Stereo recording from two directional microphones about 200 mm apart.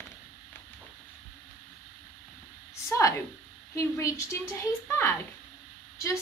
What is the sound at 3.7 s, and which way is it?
A woman's voice, 15° left (ahead or behind).